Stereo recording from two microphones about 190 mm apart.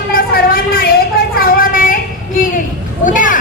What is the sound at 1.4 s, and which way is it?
Child singing, 50° left (ahead or behind).